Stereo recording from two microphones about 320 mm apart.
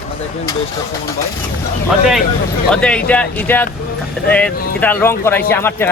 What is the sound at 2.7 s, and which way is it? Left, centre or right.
Speech, centre.